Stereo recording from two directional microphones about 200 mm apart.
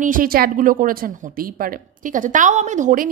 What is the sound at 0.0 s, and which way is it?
A woman's voice, 45° right (ahead or behind).